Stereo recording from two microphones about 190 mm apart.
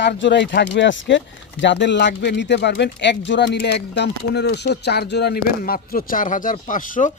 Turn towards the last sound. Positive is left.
turn(degrees=45)  # may be behind; listen again after turning